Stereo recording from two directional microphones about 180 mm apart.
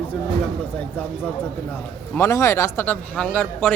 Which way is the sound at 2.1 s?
15° left (ahead or behind).